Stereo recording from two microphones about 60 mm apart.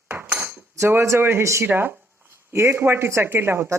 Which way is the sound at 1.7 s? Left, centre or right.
Right.